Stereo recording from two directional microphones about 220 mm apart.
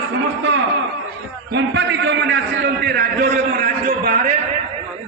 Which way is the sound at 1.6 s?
55° right (ahead or behind).